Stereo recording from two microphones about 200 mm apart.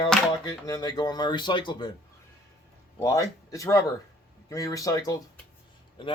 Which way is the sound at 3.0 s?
15° left (ahead or behind).